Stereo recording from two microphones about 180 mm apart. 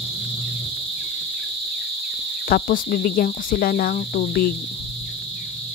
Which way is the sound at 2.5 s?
55° left (ahead or behind).